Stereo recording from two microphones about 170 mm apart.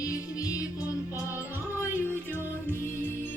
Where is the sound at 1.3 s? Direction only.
10° right (ahead or behind).